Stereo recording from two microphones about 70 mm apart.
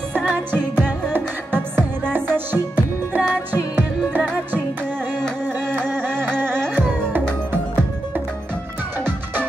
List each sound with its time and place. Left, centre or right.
0.5 s music: right
5.9 s music: right
9.0 s music: right